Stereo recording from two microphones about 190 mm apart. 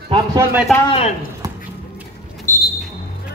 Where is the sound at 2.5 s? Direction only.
40° left (ahead or behind).